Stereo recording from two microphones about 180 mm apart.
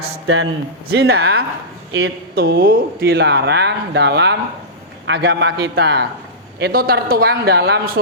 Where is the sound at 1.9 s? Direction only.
75° right (ahead or behind).